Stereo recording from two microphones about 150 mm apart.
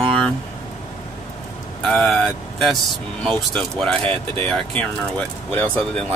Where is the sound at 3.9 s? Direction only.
40° right (ahead or behind).